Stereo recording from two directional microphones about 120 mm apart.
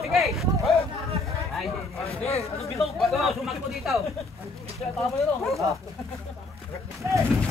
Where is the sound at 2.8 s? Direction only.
Centre (ahead or behind).